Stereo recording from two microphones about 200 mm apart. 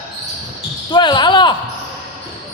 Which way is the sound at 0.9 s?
25° left (ahead or behind).